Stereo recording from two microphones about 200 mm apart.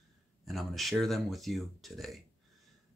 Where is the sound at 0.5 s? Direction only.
Centre (ahead or behind).